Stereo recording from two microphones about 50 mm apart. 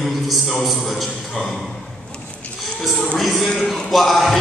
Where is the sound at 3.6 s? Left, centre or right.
Centre.